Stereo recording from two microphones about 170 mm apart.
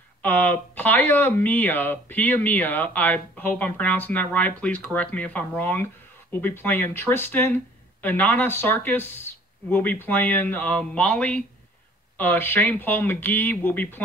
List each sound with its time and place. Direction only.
0.2 s speech: 10° left (ahead or behind)